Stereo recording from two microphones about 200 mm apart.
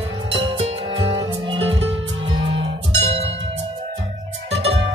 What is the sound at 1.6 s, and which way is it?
Music, 65° right (ahead or behind).